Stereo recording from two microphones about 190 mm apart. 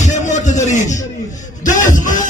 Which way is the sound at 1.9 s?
40° left (ahead or behind).